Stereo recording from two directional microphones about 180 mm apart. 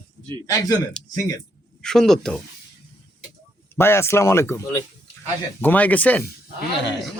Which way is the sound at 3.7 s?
15° left (ahead or behind).